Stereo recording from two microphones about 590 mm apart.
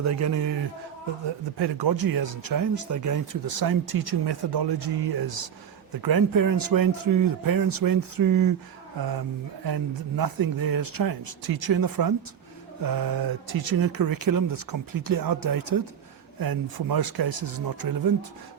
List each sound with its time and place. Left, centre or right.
0.0 s speech: right
1.5 s speech: right
9.6 s speech: right